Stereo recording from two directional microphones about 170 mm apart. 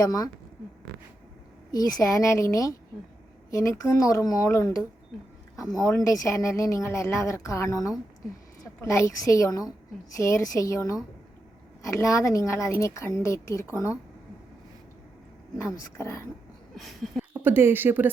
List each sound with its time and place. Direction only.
0.0 s speech: 20° left (ahead or behind)
1.7 s a woman's voice: 20° left (ahead or behind)
15.5 s a woman's voice: 20° left (ahead or behind)
16.7 s a sound: centre (ahead or behind)
17.3 s a woman's voice: 10° right (ahead or behind)